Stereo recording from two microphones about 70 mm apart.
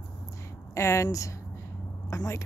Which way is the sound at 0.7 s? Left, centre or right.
Left.